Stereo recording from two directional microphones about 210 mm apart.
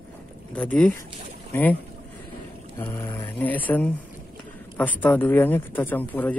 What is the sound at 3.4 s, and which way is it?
Speech, 10° left (ahead or behind).